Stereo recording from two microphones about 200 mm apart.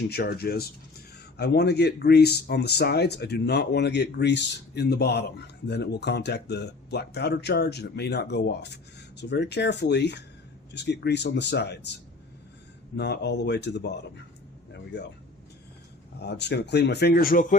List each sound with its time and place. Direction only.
0.1 s speech: 55° left (ahead or behind)
13.0 s speech: 55° left (ahead or behind)
16.1 s speech: 55° left (ahead or behind)